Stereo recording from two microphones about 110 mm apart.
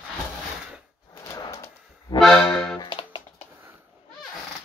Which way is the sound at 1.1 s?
30° left (ahead or behind).